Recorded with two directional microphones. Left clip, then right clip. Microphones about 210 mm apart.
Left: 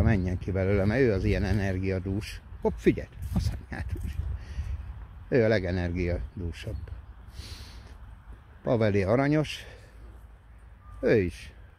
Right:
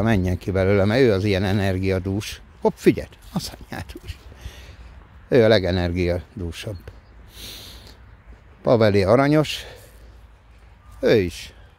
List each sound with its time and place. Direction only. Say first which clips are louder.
0.0 s speech: right 8 dB; 25° right (ahead or behind)
8.6 s speech: right 9 dB; 25° right (ahead or behind)
11.0 s speech: right 6 dB; 15° right (ahead or behind)